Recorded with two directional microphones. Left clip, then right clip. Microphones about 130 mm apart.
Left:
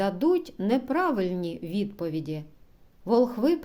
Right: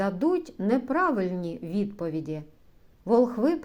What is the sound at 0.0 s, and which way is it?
A woman's voice, 25° left (ahead or behind).